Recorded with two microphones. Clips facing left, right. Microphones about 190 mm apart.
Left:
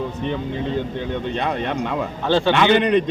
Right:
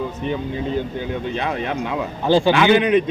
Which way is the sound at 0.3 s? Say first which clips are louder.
Right 1 dB; 5° right (ahead or behind).